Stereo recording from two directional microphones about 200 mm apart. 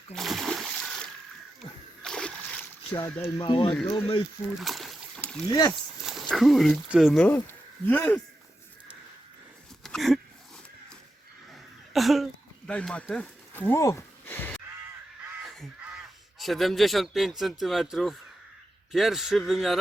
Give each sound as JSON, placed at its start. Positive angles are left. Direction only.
{"t": 0.1, "sound": "splash", "side_deg": 0}
{"t": 3.2, "sound": "speech", "side_deg": 20}
{"t": 3.7, "sound": "speech", "side_deg": 10}
{"t": 4.6, "sound": "boat", "side_deg": 0}
{"t": 5.5, "sound": "speech", "side_deg": 15}
{"t": 6.0, "sound": "speech", "side_deg": 0}
{"t": 7.3, "sound": "speech", "side_deg": 10}
{"t": 9.8, "sound": "a sound", "side_deg": 0}
{"t": 11.5, "sound": "a sound", "side_deg": 0}
{"t": 15.4, "sound": "crow", "side_deg": 0}
{"t": 16.4, "sound": "a man's voice", "side_deg": 0}